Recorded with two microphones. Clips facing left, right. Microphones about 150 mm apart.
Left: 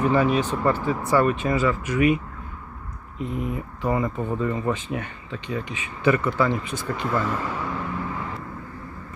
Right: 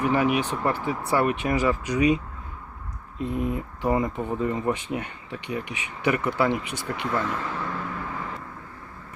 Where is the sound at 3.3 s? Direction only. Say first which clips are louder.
Right 2 dB; 20° right (ahead or behind).